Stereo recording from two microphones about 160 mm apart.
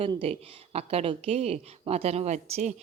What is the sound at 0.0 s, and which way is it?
Speech, 35° right (ahead or behind).